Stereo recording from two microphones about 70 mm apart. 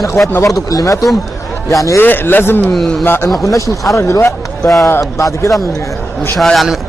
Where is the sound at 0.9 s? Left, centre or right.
Centre.